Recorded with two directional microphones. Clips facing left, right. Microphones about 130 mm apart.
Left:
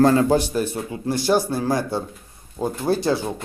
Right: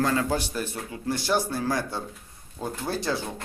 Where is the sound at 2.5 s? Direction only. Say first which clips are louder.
Left 7 dB; 25° left (ahead or behind).